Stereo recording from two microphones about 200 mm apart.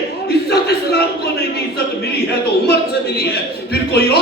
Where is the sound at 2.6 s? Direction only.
55° left (ahead or behind).